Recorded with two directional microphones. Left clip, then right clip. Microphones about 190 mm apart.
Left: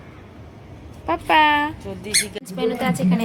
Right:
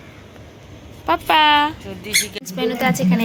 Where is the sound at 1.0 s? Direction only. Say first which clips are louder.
Right 2 dB; 5° right (ahead or behind).